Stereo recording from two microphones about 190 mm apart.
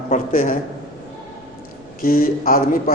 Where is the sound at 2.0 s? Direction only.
50° left (ahead or behind).